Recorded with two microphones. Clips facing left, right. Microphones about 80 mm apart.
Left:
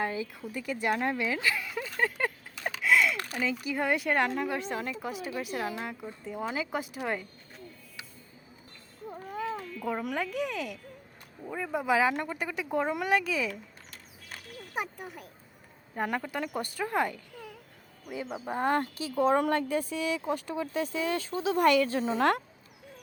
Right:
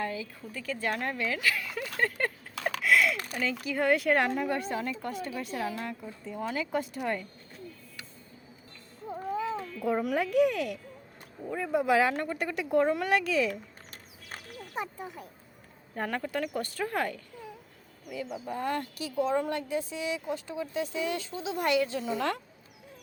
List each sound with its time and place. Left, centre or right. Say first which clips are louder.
0.0 s speech: left 2 dB; left
2.0 s speech: even; centre
9.8 s speech: right 4 dB; centre
14.8 s speech: left 1 dB; left
16.0 s speech: even; centre
18.0 s speech: even; left
19.3 s speech: left 3 dB; left